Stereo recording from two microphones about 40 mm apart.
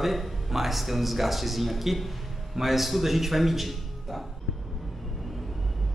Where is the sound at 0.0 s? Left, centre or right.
Centre.